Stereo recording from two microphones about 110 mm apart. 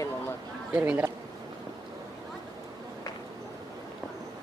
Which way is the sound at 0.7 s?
15° right (ahead or behind).